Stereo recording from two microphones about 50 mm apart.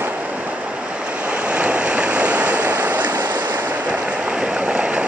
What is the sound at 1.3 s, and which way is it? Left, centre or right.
Waves, right.